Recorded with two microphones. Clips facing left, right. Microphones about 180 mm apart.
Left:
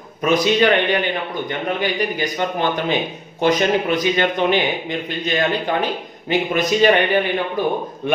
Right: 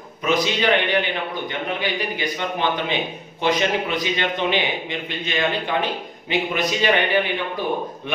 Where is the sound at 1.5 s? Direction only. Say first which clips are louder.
Left 6 dB; 45° left (ahead or behind).